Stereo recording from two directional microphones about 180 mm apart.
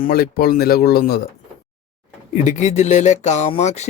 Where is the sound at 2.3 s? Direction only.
40° left (ahead or behind).